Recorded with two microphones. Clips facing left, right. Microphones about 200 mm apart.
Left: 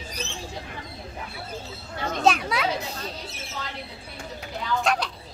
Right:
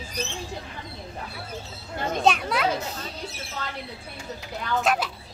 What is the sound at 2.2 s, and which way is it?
Speech, centre (ahead or behind).